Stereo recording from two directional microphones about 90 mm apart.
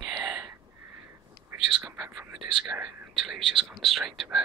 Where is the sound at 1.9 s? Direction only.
20° right (ahead or behind).